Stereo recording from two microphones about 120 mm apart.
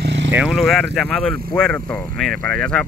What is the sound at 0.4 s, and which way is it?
Speech, centre (ahead or behind).